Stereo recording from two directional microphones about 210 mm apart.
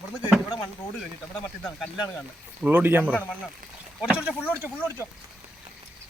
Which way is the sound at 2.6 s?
10° right (ahead or behind).